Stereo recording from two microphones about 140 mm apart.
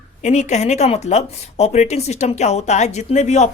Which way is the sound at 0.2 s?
55° left (ahead or behind).